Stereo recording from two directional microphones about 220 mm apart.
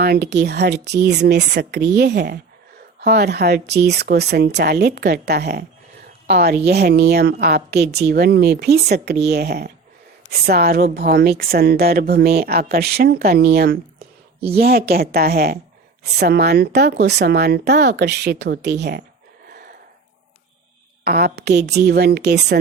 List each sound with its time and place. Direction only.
0.0 s a woman's voice: 45° right (ahead or behind)
21.0 s a woman's voice: 45° right (ahead or behind)